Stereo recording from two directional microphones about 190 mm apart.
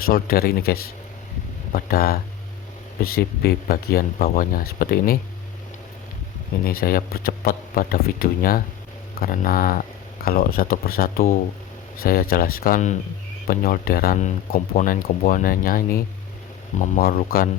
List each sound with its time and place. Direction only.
0.1 s speech: 55° left (ahead or behind)
6.7 s speech: 50° left (ahead or behind)